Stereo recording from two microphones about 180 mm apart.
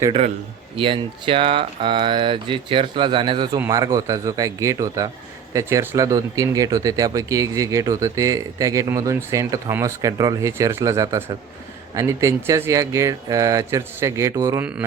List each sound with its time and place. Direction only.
0.8 s speech: 30° right (ahead or behind)